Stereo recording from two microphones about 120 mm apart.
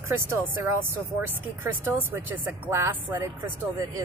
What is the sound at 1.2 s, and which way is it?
Speech, 15° right (ahead or behind).